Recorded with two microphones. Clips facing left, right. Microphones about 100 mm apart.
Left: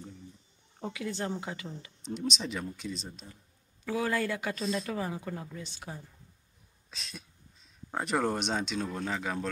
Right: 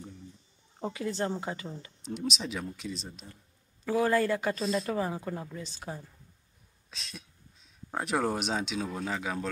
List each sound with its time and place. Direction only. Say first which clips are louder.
0.7 s a woman's voice: right 3 dB; 35° right (ahead or behind)
2.0 s speech: even; 5° right (ahead or behind)
3.8 s a woman's voice: right 4 dB; 40° right (ahead or behind)
6.9 s speech: even; centre (ahead or behind)